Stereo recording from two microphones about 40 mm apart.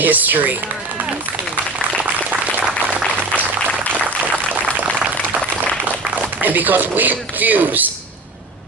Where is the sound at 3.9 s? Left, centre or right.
Right.